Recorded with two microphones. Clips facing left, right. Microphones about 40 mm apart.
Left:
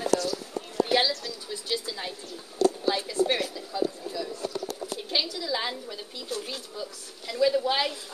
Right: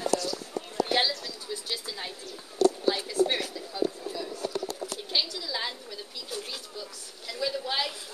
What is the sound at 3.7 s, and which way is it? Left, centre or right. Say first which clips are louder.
Speech: right 1 dB; centre.